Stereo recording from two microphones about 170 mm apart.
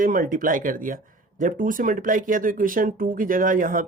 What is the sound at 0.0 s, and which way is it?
Speech, 50° right (ahead or behind).